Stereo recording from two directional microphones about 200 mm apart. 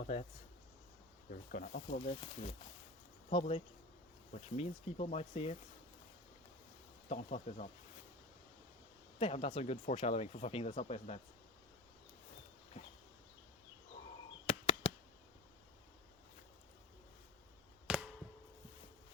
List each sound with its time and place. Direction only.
0.0 s speech: 35° left (ahead or behind)
1.5 s speech: 45° left (ahead or behind)
2.2 s speech: 30° left (ahead or behind)
7.1 s speech: 35° left (ahead or behind)
9.1 s speech: 30° left (ahead or behind)
14.4 s a sound: 25° left (ahead or behind)
17.9 s a sound: 5° right (ahead or behind)